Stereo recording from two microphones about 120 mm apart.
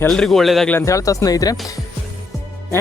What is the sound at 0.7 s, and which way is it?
Speech, 25° left (ahead or behind).